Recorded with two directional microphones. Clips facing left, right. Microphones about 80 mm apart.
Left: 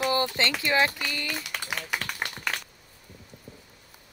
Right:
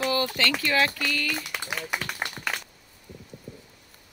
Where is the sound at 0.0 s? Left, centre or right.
Left.